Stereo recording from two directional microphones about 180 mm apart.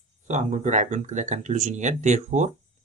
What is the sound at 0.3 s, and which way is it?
Speech, 40° right (ahead or behind).